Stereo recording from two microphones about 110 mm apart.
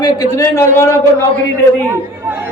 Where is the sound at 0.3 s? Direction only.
25° left (ahead or behind).